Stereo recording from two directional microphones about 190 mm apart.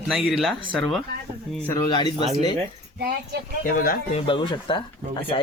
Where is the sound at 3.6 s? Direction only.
50° left (ahead or behind).